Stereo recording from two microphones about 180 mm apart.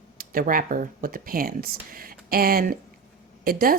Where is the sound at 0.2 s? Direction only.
50° right (ahead or behind).